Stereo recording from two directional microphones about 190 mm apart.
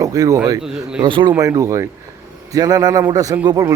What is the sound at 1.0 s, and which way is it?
A man's voice, 25° right (ahead or behind).